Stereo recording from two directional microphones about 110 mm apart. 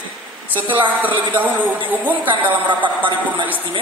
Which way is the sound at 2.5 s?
50° right (ahead or behind).